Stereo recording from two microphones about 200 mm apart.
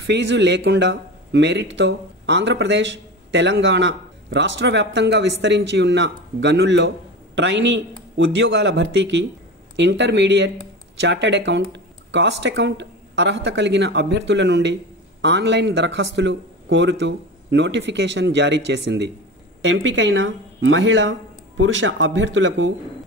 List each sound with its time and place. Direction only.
0.0 s speech: 65° right (ahead or behind)